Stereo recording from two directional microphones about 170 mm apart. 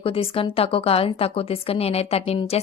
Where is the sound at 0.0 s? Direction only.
35° left (ahead or behind).